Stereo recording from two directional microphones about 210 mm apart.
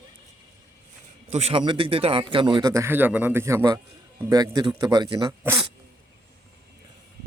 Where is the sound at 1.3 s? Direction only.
30° right (ahead or behind); by 5.7 s 15° right (ahead or behind).